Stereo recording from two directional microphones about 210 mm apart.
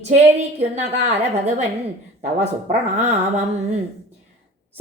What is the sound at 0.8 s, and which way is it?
Speech, 35° right (ahead or behind).